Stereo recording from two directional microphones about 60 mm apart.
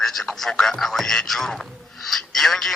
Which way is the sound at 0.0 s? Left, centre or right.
Centre.